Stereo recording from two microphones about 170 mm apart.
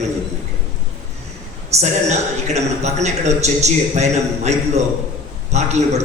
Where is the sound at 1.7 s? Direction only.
40° right (ahead or behind).